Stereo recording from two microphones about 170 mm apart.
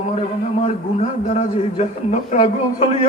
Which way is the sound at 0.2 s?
40° left (ahead or behind).